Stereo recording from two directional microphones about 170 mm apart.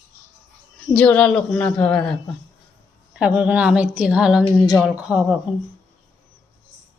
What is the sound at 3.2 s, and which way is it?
Speech, 5° right (ahead or behind).